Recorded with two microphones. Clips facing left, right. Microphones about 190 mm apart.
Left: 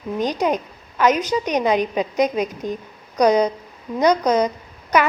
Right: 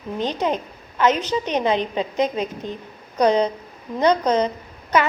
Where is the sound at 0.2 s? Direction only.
10° left (ahead or behind).